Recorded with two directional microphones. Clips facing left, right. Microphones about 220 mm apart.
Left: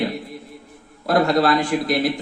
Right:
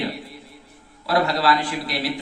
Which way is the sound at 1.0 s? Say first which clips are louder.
Left 4 dB; 50° left (ahead or behind).